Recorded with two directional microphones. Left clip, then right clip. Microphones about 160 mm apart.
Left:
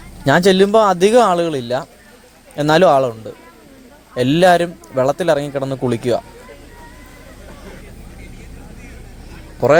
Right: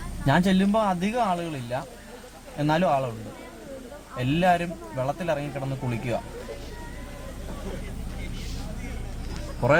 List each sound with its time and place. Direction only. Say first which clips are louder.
0.3 s a man's voice: left 12 dB; 40° left (ahead or behind)
4.2 s a man's voice: left 11 dB; 45° left (ahead or behind)